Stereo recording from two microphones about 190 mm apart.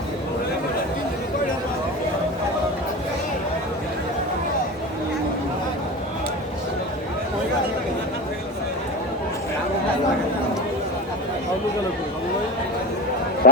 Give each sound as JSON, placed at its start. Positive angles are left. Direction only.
{"t": 13.4, "sound": "speech", "side_deg": 50}